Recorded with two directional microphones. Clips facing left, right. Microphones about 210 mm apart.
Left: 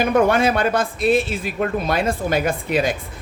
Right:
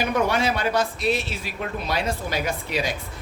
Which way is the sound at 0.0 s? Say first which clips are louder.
Left 6 dB; 50° left (ahead or behind).